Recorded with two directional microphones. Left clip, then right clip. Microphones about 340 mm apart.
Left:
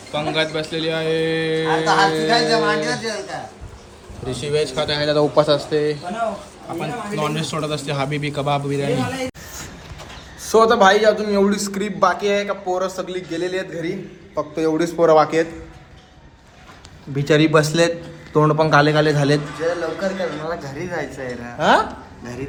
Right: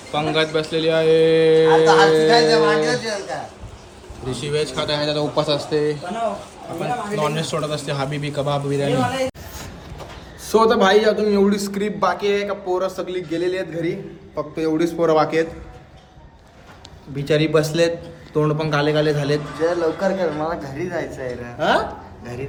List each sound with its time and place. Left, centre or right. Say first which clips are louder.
0.1 s a man's voice: right 1 dB; centre
17.2 s a man's voice: left 3 dB; centre
19.5 s a man's voice: right 2 dB; right
20.5 s speech: right 1 dB; centre
21.6 s a man's voice: left 3 dB; centre
22.2 s a man's voice: left 1 dB; centre